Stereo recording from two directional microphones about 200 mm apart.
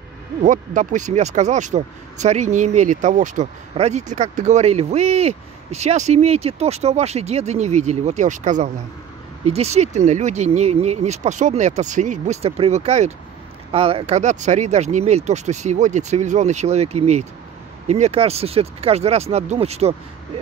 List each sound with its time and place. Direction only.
0.4 s speech: 40° right (ahead or behind)